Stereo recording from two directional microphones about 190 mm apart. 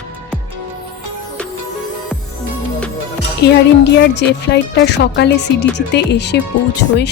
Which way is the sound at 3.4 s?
60° left (ahead or behind).